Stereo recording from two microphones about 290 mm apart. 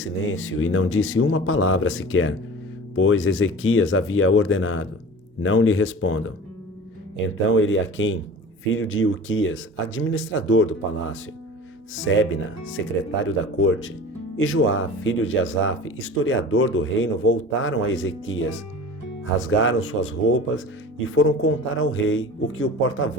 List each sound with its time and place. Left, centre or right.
0.0 s speech: left
7.5 s speech: left